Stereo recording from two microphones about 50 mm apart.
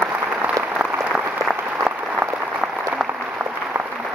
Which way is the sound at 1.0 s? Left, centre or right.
Right.